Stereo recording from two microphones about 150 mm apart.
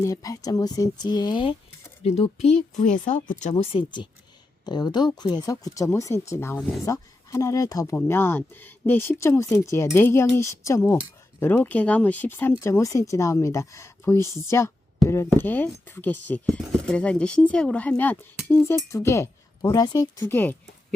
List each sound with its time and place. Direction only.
0.0 s speech: 25° left (ahead or behind)
2.0 s speech: 45° left (ahead or behind); by 3.5 s 60° left (ahead or behind)
3.5 s speech: 40° left (ahead or behind)
20.2 s speech: 15° left (ahead or behind)